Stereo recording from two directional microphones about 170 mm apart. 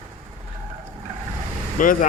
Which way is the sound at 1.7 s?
50° left (ahead or behind).